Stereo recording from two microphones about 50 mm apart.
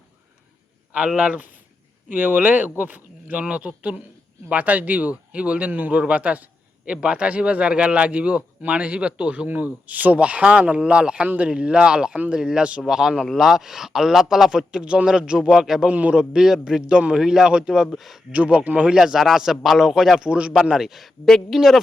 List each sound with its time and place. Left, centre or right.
0.9 s a man's voice: right
2.0 s a man's voice: right; by 15.9 s centre
15.9 s a man's voice: right
16.1 s a man's voice: centre
18.3 s a man's voice: right
18.9 s a man's voice: centre
20.2 s a man's voice: right
20.5 s a man's voice: centre
21.2 s speech: centre